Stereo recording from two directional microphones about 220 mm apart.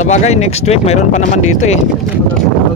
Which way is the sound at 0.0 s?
30° left (ahead or behind).